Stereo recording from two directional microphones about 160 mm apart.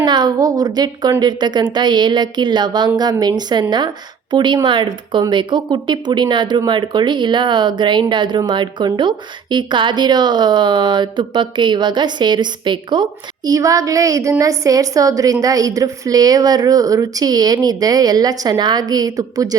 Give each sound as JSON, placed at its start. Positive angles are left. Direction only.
{"t": 0.0, "sound": "speech", "side_deg": -25}